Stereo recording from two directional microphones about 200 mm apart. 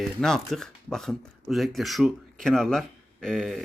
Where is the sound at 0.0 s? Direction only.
Centre (ahead or behind).